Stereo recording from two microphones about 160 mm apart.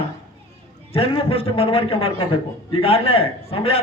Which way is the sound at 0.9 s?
35° left (ahead or behind).